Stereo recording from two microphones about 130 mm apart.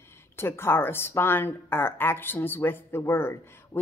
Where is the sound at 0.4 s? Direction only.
20° left (ahead or behind).